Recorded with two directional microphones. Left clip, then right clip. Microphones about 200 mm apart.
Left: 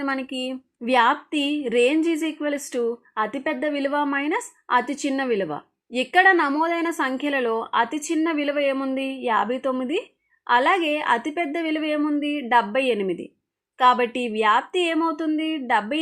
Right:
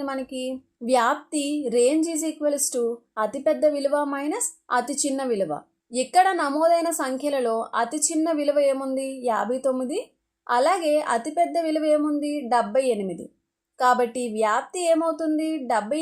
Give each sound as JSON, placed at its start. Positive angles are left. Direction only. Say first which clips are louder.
{"t": 0.0, "sound": "speech", "louder": "left 2 dB", "side_deg": 20}